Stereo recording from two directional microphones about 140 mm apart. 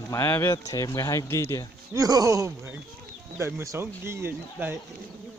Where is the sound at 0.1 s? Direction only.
15° left (ahead or behind).